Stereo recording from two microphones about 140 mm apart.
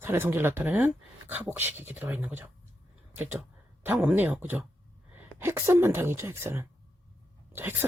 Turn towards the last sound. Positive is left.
turn(degrees=-15)  # may be behind; listen again after turning